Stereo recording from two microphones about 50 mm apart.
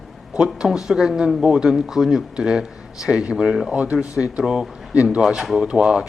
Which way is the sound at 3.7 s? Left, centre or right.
Right.